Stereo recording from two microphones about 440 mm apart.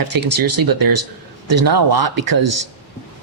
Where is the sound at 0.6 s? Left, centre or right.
Right.